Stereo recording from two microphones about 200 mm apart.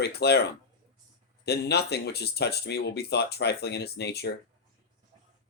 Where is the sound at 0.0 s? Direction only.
55° left (ahead or behind).